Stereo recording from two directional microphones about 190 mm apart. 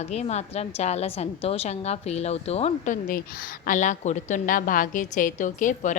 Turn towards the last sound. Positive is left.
turn(degrees=40)  # may be behind; listen again after turning